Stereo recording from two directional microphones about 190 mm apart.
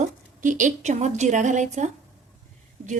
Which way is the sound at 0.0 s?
40° right (ahead or behind).